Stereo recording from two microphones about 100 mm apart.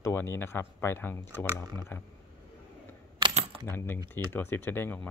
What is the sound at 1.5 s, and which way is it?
Speech, 40° right (ahead or behind).